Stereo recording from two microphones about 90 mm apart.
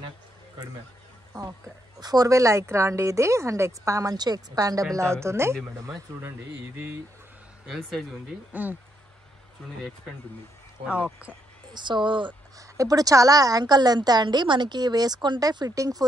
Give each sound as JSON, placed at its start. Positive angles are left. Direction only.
{"t": 2.0, "sound": "a woman's voice", "side_deg": -45}
{"t": 4.9, "sound": "a woman's voice", "side_deg": -30}
{"t": 7.6, "sound": "speech", "side_deg": 0}
{"t": 8.5, "sound": "speech", "side_deg": -20}
{"t": 11.7, "sound": "speech", "side_deg": -60}
{"t": 12.5, "sound": "a woman's voice", "side_deg": -40}